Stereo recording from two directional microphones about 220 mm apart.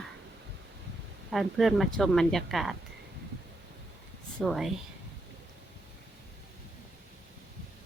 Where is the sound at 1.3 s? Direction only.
Centre (ahead or behind).